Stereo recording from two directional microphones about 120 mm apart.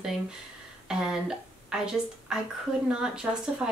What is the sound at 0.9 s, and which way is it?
A woman's voice, 5° right (ahead or behind).